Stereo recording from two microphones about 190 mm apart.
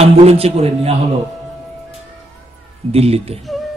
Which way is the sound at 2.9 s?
30° right (ahead or behind).